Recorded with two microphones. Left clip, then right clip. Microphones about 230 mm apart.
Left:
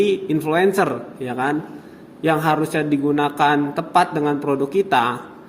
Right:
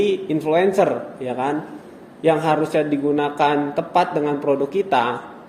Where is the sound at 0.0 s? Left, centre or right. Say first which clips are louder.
Left 1 dB; left.